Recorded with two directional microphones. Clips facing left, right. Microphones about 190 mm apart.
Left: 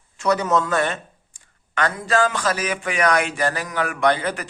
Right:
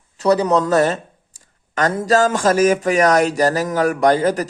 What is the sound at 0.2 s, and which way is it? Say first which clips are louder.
Speech: right 5 dB; 35° right (ahead or behind).